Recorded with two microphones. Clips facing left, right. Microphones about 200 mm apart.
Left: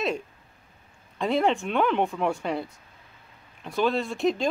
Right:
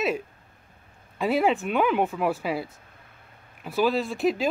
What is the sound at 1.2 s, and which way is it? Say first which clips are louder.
Speech: right 1 dB; 5° right (ahead or behind).